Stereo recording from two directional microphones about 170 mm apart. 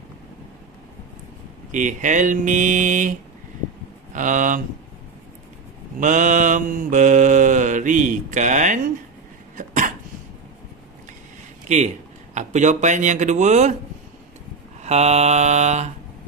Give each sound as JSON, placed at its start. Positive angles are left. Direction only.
{"t": 1.7, "sound": "mantra", "side_deg": -50}
{"t": 5.9, "sound": "mantra", "side_deg": -45}
{"t": 9.6, "sound": "cough", "side_deg": -50}
{"t": 12.4, "sound": "mantra", "side_deg": -45}
{"t": 14.8, "sound": "mantra", "side_deg": -40}